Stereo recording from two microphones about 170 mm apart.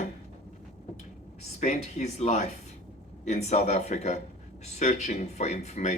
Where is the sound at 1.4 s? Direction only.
40° left (ahead or behind).